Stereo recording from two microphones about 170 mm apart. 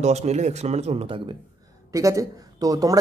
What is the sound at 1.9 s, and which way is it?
Speech, 20° right (ahead or behind).